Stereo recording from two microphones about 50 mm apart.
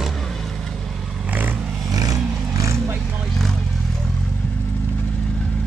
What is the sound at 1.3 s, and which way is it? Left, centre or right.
Vehicle, right.